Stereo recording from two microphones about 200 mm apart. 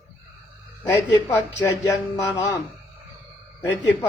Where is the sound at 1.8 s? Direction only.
15° left (ahead or behind).